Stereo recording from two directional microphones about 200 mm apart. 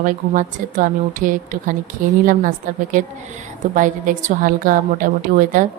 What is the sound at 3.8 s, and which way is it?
A woman's voice, 40° right (ahead or behind).